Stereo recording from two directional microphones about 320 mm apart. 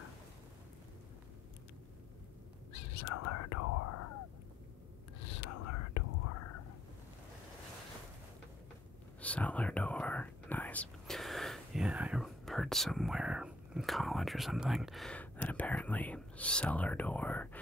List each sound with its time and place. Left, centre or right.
2.7 s whispering: left
5.2 s whispering: left
9.2 s speech: centre